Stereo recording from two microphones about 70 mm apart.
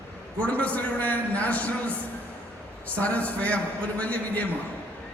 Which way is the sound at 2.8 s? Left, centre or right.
Left.